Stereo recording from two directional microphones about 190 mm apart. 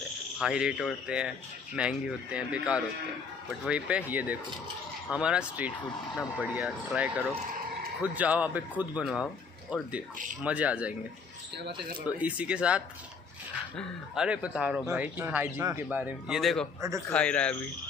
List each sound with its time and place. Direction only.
0.4 s speech: 5° right (ahead or behind)
12.2 s speech: 5° right (ahead or behind)